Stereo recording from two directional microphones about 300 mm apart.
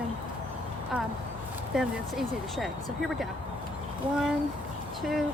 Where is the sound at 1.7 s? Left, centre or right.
Centre.